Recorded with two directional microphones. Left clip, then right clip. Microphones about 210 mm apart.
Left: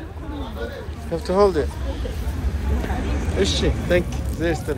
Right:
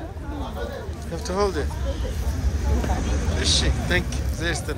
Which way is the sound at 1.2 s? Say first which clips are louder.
Left 7 dB; 10° right (ahead or behind).